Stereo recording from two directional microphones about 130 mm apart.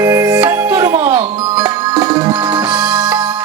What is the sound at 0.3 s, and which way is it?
Music, 10° right (ahead or behind).